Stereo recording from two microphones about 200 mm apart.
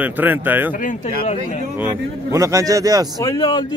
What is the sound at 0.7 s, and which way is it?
Speech, 40° left (ahead or behind).